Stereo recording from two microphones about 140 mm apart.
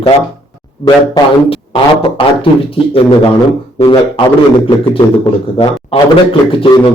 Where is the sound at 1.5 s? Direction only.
40° left (ahead or behind).